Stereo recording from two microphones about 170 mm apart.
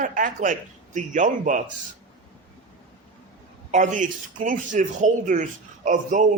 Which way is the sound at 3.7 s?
45° right (ahead or behind).